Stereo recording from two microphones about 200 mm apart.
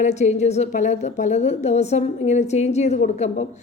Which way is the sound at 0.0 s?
35° left (ahead or behind).